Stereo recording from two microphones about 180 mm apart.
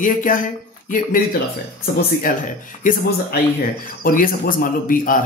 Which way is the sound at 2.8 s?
50° left (ahead or behind).